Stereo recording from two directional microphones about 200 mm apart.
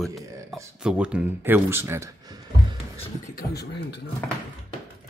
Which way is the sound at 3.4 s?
55° left (ahead or behind).